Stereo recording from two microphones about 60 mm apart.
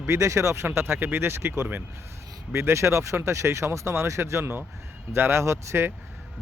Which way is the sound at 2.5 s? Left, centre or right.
Right.